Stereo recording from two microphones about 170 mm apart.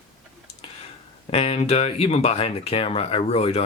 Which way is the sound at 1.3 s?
35° left (ahead or behind).